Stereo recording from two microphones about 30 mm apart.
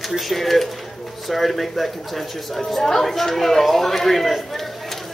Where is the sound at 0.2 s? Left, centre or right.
Centre.